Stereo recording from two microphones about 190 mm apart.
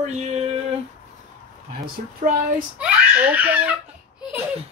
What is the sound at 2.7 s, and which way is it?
Speech, 5° right (ahead or behind).